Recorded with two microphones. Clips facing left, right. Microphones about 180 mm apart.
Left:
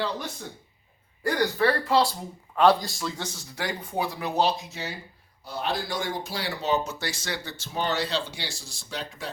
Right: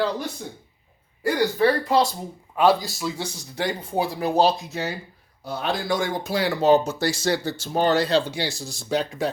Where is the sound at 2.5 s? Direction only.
5° right (ahead or behind); by 4.5 s 35° right (ahead or behind).